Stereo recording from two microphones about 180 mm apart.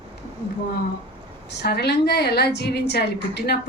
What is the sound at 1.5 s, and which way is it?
A woman's voice, 65° left (ahead or behind).